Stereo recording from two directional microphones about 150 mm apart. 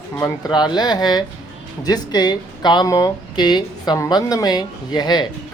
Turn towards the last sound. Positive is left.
turn(degrees=30)  # may be behind; listen again after turning